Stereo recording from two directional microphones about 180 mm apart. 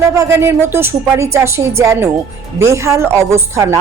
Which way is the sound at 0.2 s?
15° right (ahead or behind).